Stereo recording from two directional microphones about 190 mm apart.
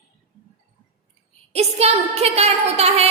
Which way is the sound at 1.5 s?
30° right (ahead or behind).